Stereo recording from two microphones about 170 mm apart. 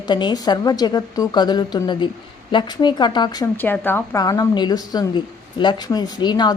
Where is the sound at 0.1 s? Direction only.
25° left (ahead or behind).